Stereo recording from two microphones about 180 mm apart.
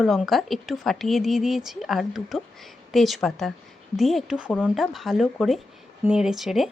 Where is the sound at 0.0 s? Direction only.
Centre (ahead or behind).